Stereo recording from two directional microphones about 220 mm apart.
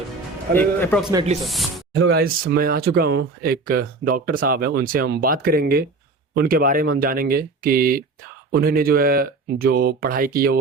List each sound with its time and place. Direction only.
0.5 s a man's voice: 10° left (ahead or behind)
2.0 s speech: 45° right (ahead or behind)